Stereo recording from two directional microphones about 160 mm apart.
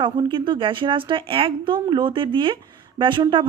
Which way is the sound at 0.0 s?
30° right (ahead or behind).